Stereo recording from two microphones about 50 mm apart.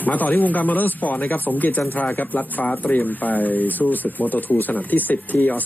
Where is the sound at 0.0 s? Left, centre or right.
Left.